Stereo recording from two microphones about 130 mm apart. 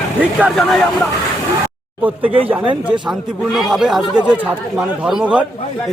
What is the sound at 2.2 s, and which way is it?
Speech, 45° right (ahead or behind).